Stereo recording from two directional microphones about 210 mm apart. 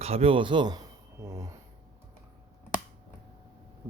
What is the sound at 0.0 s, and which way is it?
A man's voice, 30° right (ahead or behind).